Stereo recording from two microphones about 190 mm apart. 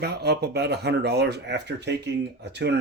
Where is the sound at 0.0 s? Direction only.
60° right (ahead or behind).